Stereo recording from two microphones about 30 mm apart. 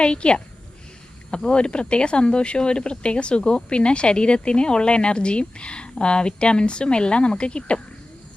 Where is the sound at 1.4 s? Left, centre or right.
Left.